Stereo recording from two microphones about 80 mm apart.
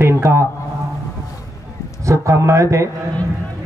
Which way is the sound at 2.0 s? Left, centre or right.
Right.